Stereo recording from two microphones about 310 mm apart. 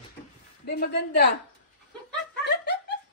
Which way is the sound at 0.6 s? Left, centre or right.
Left.